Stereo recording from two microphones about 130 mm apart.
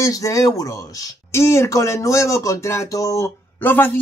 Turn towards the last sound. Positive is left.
turn(degrees=15)  # may be behind; listen again after turning